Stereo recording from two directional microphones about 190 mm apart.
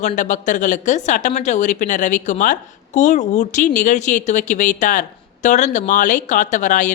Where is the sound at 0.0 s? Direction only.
40° left (ahead or behind).